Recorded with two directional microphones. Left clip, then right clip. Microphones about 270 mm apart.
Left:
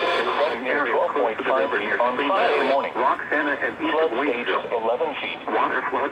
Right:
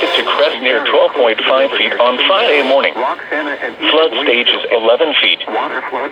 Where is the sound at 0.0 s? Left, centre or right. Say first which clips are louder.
Right 9 dB; right.